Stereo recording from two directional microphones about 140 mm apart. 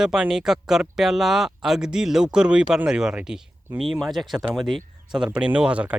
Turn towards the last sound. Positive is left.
turn(degrees=-10)  # may be behind; listen again after turning